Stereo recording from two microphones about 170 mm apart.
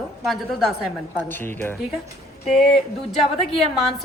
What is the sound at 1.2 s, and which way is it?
Speech, 10° left (ahead or behind).